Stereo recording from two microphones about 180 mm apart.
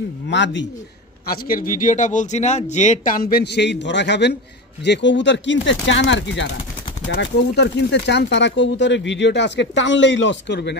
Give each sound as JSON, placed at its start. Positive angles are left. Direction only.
{"t": 0.3, "sound": "speech", "side_deg": 85}
{"t": 1.2, "sound": "a man's voice", "side_deg": 55}
{"t": 7.2, "sound": "speech", "side_deg": 70}